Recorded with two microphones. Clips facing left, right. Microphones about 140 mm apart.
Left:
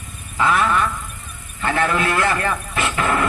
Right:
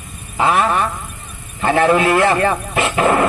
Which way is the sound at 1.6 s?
30° right (ahead or behind).